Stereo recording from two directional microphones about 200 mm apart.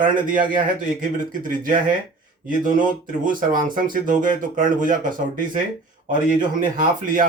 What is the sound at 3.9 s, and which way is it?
Speech, 40° right (ahead or behind).